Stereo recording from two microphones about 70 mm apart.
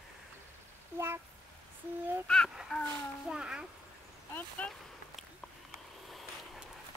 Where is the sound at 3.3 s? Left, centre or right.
Centre.